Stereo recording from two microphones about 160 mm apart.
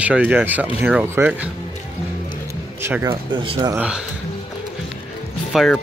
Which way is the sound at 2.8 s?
15° right (ahead or behind).